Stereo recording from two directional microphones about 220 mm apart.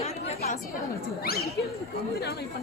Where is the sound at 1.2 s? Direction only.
45° left (ahead or behind).